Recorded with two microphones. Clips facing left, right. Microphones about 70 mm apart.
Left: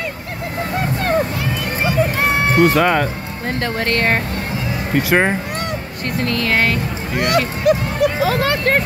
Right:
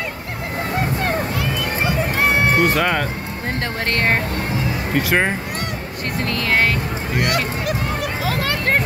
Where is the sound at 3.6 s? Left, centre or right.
Centre.